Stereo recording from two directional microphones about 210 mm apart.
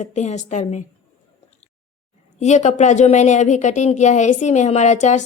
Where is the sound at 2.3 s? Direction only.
35° left (ahead or behind).